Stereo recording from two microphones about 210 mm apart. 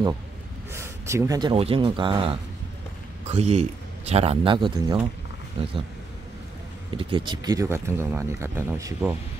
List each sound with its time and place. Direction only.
0.7 s speech: 15° right (ahead or behind)
6.9 s speech: 25° right (ahead or behind)